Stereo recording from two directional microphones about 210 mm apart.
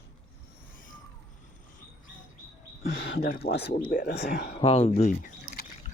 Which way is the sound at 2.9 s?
50° left (ahead or behind).